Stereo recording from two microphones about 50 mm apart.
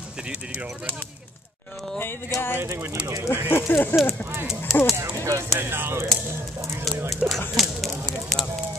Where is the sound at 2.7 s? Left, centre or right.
Right.